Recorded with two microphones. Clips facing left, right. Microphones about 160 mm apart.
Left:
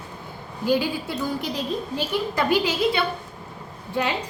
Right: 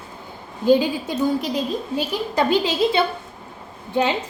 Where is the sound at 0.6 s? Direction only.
20° right (ahead or behind).